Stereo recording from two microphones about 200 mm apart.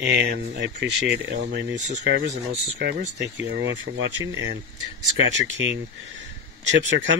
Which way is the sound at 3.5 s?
65° right (ahead or behind).